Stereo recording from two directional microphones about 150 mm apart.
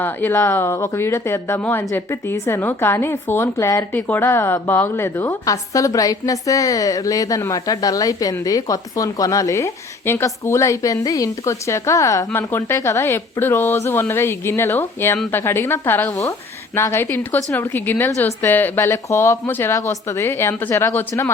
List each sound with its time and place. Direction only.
0.0 s speech: 15° left (ahead or behind)